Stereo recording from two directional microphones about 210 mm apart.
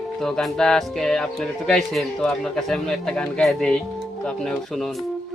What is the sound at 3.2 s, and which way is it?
Speech, 5° left (ahead or behind).